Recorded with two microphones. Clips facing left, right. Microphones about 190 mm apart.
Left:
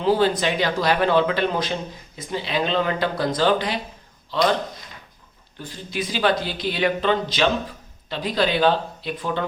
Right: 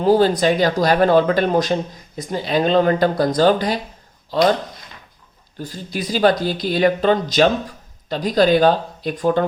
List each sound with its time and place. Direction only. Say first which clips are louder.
0.0 s speech: right 5 dB; 40° right (ahead or behind)
5.5 s speech: right 2 dB; 40° right (ahead or behind)